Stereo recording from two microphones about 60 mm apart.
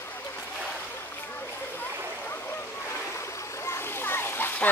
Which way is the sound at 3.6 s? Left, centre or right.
Left.